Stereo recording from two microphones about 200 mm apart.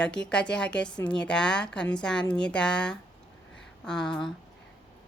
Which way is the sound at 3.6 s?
5° left (ahead or behind).